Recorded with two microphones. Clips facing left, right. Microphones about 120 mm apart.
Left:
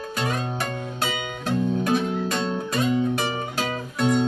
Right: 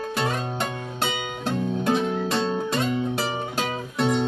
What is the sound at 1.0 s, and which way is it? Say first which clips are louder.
Music: right 2 dB; 25° right (ahead or behind).